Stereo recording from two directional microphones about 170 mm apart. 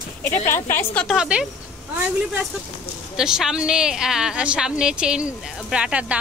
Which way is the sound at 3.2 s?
5° right (ahead or behind).